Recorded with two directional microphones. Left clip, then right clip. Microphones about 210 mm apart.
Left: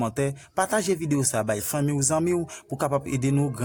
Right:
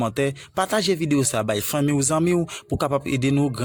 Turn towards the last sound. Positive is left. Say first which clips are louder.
# right 4 dB
turn(degrees=-30)  # may be behind; listen again after turning